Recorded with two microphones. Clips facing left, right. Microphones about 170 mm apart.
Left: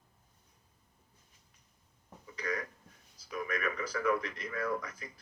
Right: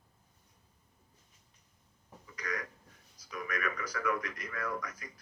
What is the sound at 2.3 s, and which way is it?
Throat clearing, 30° left (ahead or behind).